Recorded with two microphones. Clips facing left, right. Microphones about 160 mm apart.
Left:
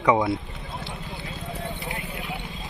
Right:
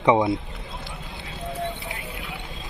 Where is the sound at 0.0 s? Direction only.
25° right (ahead or behind).